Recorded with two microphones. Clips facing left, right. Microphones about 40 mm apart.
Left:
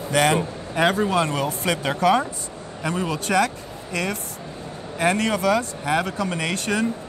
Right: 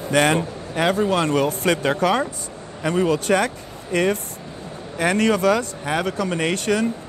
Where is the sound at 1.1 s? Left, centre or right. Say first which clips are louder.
Right 3 dB; right.